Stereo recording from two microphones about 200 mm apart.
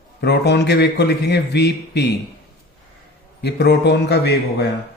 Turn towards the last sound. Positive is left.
turn(degrees=55)  # may be behind; listen again after turning